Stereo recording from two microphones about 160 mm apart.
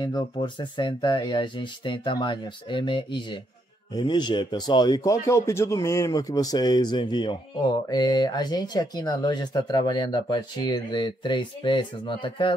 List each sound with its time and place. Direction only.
0.0 s speech: 30° left (ahead or behind)